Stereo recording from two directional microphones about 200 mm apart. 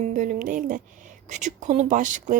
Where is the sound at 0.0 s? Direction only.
40° right (ahead or behind).